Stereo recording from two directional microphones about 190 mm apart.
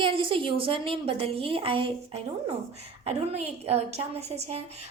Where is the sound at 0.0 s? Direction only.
25° right (ahead or behind).